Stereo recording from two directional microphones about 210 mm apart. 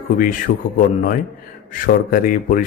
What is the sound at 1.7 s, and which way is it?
Speech, 40° left (ahead or behind).